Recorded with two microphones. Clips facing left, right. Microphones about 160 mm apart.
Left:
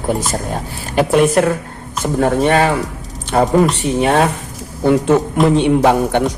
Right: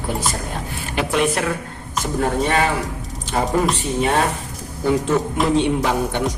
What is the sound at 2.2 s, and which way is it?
Speech, 60° left (ahead or behind).